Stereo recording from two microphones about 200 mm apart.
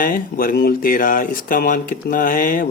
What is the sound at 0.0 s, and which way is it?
Speech, 45° left (ahead or behind).